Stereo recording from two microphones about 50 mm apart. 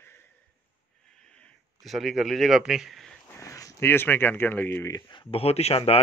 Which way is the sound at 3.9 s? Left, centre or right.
Left.